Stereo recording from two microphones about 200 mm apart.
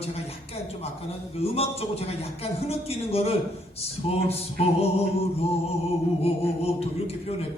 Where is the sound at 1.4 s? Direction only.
30° left (ahead or behind).